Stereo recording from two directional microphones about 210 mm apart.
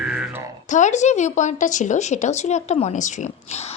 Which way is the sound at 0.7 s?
35° left (ahead or behind).